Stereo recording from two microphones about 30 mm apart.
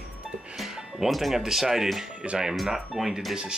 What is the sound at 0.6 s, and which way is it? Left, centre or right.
Music, centre.